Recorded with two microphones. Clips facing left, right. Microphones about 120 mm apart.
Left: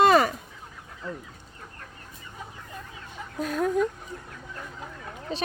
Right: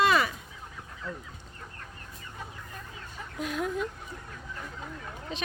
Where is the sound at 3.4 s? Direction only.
40° left (ahead or behind).